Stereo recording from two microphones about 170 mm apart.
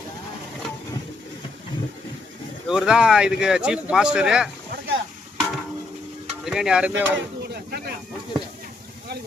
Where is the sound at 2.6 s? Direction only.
5° right (ahead or behind).